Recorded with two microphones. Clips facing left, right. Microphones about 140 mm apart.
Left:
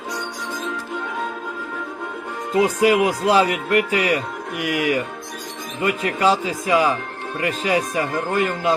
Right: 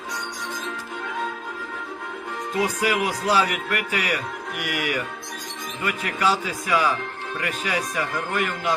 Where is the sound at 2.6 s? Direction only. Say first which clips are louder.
Left 7 dB; 25° left (ahead or behind).